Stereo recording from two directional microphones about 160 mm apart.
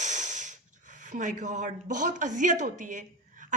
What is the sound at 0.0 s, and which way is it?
Snort, 50° right (ahead or behind).